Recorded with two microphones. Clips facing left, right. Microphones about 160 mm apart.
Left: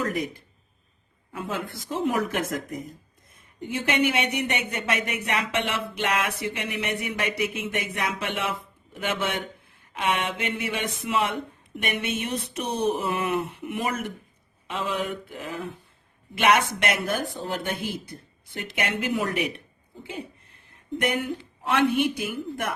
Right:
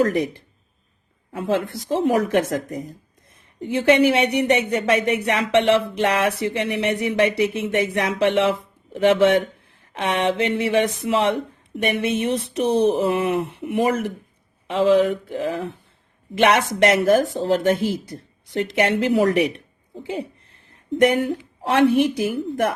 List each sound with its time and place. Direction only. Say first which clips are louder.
0.0 s speech: right 8 dB; 30° right (ahead or behind)
20.1 s a sound: right 8 dB; 35° right (ahead or behind)
21.0 s speech: right 10 dB; 35° right (ahead or behind)